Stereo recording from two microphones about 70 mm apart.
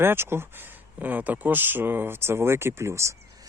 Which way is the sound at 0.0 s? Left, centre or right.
Right.